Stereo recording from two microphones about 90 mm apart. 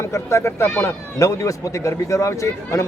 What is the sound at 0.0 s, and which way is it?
Speech, 30° left (ahead or behind).